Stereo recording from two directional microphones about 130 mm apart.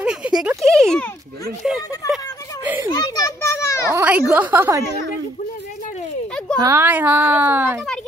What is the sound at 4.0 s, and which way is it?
Speech, 10° right (ahead or behind).